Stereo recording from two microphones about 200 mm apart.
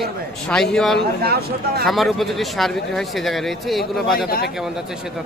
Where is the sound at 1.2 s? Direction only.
50° right (ahead or behind).